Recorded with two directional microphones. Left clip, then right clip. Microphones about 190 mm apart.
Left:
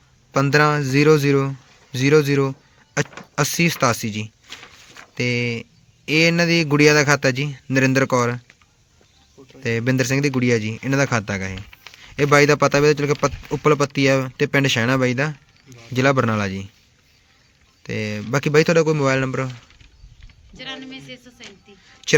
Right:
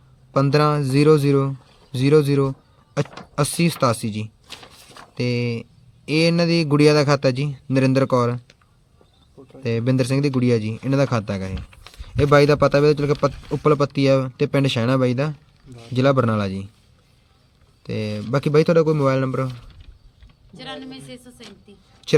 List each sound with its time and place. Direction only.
0.3 s a man's voice: centre (ahead or behind)
4.4 s a sound: 35° right (ahead or behind)
5.1 s a man's voice: centre (ahead or behind)
9.6 s a man's voice: centre (ahead or behind)
11.5 s a sound: 65° right (ahead or behind)
12.0 s a man's voice: centre (ahead or behind)
17.8 s a man's voice: centre (ahead or behind)
20.6 s music: 65° right (ahead or behind)
22.0 s a sound: centre (ahead or behind)